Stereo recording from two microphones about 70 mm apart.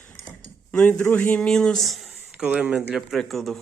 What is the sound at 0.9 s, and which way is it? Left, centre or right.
Speech, left.